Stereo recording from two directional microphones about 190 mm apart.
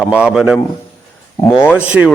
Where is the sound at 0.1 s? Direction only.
5° right (ahead or behind).